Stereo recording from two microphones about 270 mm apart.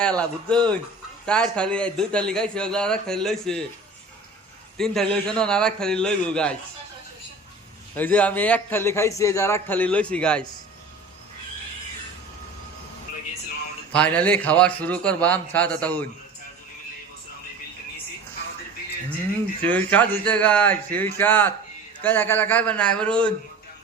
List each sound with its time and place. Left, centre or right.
0.0 s a man's voice: centre
4.8 s a man's voice: centre
7.9 s a man's voice: centre
13.9 s a man's voice: centre
19.6 s a man's voice: centre